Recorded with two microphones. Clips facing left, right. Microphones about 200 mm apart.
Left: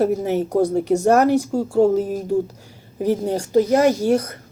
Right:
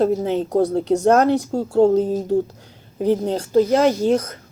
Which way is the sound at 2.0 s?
20° right (ahead or behind).